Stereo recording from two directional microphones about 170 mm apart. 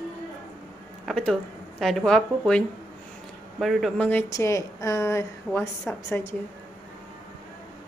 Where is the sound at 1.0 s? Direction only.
5° left (ahead or behind).